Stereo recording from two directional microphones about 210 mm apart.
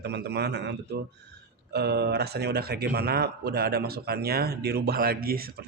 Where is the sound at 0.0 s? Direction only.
50° right (ahead or behind).